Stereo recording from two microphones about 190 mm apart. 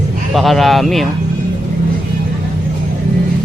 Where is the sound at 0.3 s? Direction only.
Centre (ahead or behind).